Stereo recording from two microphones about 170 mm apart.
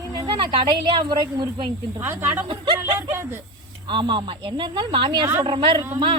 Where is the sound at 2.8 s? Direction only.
15° right (ahead or behind).